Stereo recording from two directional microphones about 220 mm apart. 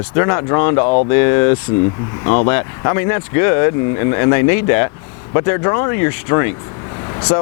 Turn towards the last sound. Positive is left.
turn(degrees=20)  # may be behind; listen again after turning